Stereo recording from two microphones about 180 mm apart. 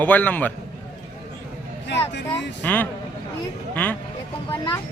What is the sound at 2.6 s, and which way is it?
Speech, 10° left (ahead or behind).